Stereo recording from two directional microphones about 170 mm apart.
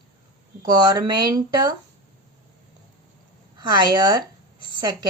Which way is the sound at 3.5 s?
25° right (ahead or behind).